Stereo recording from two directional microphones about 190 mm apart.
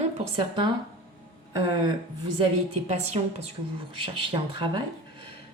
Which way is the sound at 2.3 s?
35° right (ahead or behind).